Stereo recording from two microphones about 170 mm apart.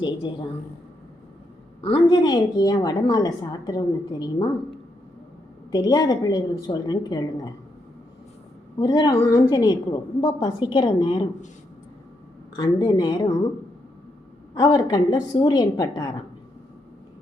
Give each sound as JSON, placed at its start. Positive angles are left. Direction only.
{"t": 1.8, "sound": "a woman's voice", "side_deg": 30}
{"t": 5.7, "sound": "a woman's voice", "side_deg": 20}
{"t": 8.8, "sound": "a woman's voice", "side_deg": 25}
{"t": 12.5, "sound": "a woman's voice", "side_deg": 25}
{"t": 14.5, "sound": "a woman's voice", "side_deg": 25}